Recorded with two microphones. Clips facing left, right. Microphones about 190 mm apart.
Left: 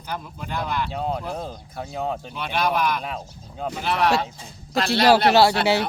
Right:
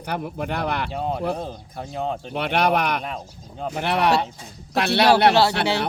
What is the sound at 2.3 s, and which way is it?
Speech, 65° right (ahead or behind).